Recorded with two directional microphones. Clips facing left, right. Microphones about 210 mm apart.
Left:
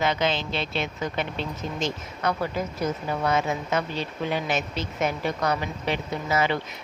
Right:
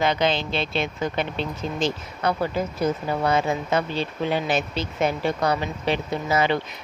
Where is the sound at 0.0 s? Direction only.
35° right (ahead or behind).